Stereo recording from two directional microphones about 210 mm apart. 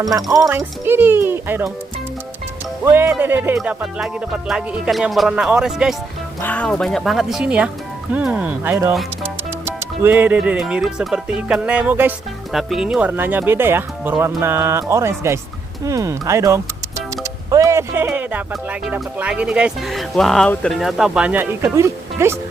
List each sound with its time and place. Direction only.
0.0 s speech: 15° right (ahead or behind)
2.8 s speech: 10° right (ahead or behind)